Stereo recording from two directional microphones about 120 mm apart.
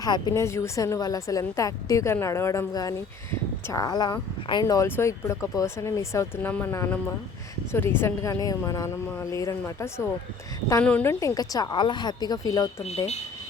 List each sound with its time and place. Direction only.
0.0 s speech: 35° left (ahead or behind)
0.3 s a woman's voice: 20° left (ahead or behind); by 4.6 s 40° left (ahead or behind)
4.6 s a woman's voice: 25° left (ahead or behind)